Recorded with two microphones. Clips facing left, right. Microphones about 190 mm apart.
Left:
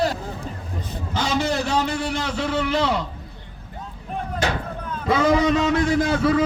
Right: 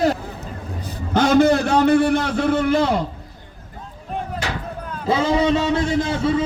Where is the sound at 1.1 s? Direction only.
55° right (ahead or behind).